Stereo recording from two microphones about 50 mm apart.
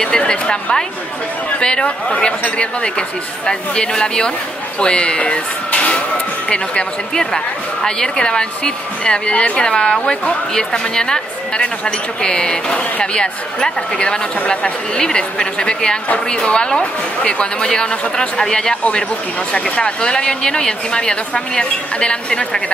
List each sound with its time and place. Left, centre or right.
0.0 s speech: centre